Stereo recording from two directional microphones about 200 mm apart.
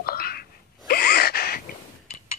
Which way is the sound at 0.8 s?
50° left (ahead or behind).